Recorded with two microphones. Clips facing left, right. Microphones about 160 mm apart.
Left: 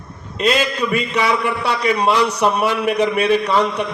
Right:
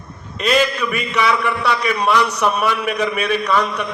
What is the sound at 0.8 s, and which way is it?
A man's voice, 30° left (ahead or behind).